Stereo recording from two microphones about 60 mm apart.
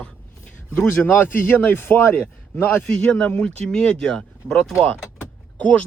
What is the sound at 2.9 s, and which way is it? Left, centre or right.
Speech, centre.